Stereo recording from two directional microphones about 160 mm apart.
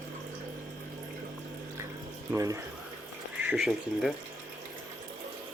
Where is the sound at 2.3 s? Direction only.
20° right (ahead or behind).